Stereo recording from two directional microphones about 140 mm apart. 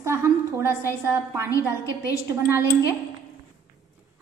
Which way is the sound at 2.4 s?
20° right (ahead or behind).